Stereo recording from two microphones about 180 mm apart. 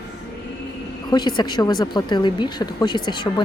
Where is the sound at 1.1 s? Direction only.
25° left (ahead or behind).